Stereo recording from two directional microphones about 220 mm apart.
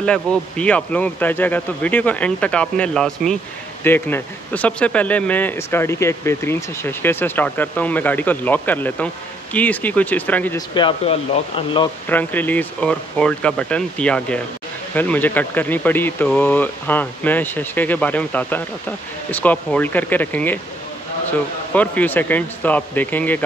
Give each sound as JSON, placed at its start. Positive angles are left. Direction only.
{"t": 0.0, "sound": "speech", "side_deg": 5}
{"t": 10.7, "sound": "speech", "side_deg": 20}
{"t": 12.1, "sound": "speech", "side_deg": 10}